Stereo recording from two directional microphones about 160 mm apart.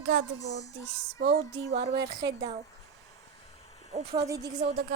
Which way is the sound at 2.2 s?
25° right (ahead or behind).